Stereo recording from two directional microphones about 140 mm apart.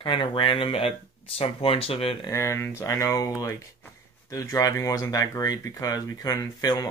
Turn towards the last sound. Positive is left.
turn(degrees=25)  # may be behind; listen again after turning